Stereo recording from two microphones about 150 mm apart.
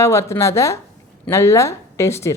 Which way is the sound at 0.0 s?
20° left (ahead or behind).